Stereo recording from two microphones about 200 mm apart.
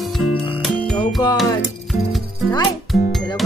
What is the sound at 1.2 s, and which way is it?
Music, 20° left (ahead or behind).